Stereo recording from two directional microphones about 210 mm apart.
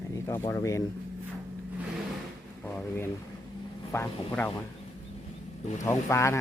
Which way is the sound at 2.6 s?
10° left (ahead or behind).